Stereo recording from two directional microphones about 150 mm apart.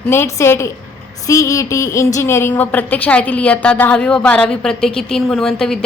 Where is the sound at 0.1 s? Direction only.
15° left (ahead or behind).